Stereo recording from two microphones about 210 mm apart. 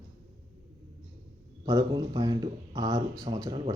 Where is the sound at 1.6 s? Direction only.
15° right (ahead or behind).